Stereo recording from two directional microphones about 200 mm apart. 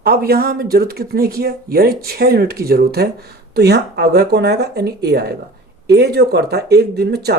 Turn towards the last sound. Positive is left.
turn(degrees=-55)  # may be behind; listen again after turning